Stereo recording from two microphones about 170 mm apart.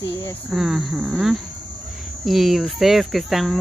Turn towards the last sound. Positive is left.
turn(degrees=0)  # may be behind; listen again after turning